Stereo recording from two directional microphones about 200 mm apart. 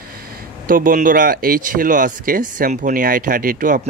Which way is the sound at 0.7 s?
45° right (ahead or behind).